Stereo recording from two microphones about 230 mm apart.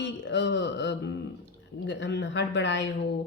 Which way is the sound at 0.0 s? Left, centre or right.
Left.